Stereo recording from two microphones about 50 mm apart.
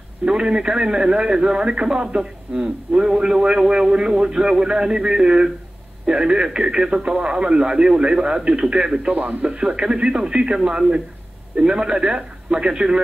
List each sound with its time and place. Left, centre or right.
0.2 s a man's voice: centre